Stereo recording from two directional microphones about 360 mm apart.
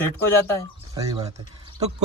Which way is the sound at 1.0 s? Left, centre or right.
Centre.